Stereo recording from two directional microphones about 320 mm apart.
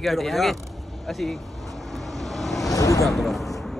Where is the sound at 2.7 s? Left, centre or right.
Centre.